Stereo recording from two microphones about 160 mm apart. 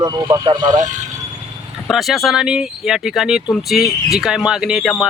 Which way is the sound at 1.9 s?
Centre (ahead or behind).